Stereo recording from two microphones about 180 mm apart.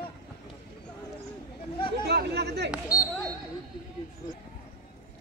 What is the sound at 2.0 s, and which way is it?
Chatter, 65° right (ahead or behind).